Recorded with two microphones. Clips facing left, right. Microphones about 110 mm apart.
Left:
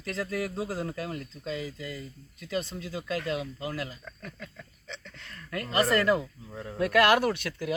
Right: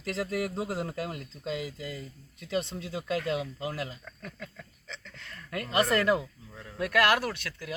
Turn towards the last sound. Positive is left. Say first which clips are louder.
# left 6 dB
turn(degrees=10)  # may be behind; listen again after turning